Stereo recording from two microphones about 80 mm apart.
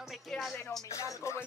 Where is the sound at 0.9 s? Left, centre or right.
Left.